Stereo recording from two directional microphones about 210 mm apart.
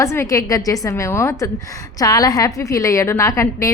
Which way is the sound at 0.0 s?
15° left (ahead or behind).